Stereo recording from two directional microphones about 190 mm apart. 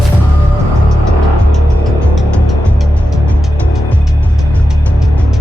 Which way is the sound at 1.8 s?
Centre (ahead or behind).